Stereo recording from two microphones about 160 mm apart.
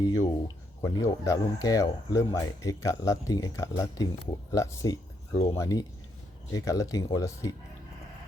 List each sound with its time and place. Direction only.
0.0 s speech: 25° left (ahead or behind)